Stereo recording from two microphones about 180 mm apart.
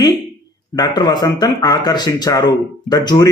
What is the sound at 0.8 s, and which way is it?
Speech, 20° left (ahead or behind).